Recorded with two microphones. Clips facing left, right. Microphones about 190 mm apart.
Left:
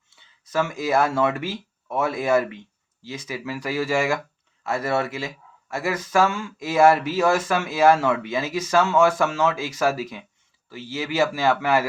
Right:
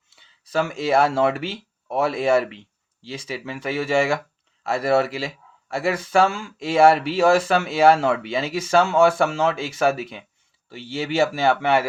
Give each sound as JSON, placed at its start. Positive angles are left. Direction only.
{"t": 0.5, "sound": "speech", "side_deg": -30}